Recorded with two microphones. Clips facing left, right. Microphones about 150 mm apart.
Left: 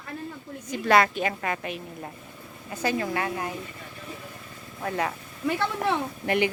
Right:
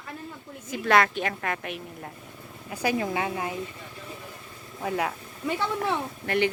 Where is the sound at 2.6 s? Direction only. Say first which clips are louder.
Even; 10° right (ahead or behind).